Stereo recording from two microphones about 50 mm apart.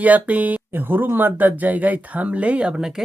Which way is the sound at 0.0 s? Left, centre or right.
Right.